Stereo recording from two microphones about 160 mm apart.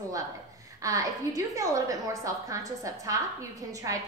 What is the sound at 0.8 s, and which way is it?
A woman's voice, 20° right (ahead or behind).